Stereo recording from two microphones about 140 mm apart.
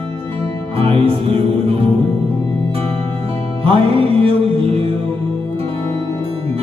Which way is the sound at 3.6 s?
45° right (ahead or behind).